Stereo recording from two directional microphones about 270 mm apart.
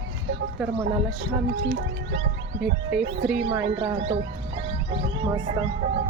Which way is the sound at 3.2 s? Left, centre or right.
Centre.